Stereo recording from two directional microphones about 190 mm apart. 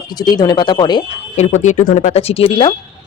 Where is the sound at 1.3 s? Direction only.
40° left (ahead or behind).